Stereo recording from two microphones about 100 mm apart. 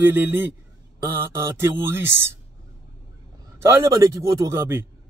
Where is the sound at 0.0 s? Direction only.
20° right (ahead or behind).